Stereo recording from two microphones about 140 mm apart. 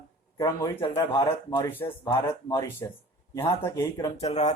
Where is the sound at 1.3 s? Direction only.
25° left (ahead or behind).